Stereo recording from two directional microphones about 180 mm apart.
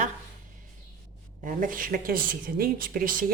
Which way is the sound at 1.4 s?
45° right (ahead or behind).